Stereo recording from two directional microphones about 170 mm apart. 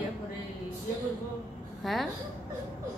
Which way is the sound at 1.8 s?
Centre (ahead or behind).